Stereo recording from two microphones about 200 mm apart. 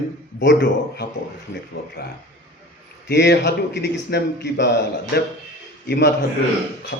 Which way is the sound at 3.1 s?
55° left (ahead or behind).